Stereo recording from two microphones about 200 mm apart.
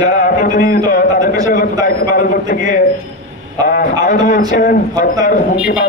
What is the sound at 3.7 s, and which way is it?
A man's voice, 40° left (ahead or behind).